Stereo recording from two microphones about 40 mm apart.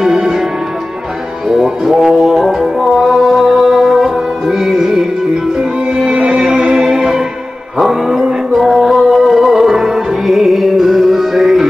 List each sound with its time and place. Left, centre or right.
0.0 s music: centre
1.5 s music: centre
6.0 s music: centre
7.8 s a sound: centre
8.5 s music: centre